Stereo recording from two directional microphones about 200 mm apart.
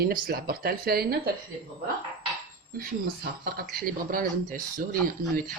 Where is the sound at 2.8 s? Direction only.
50° right (ahead or behind).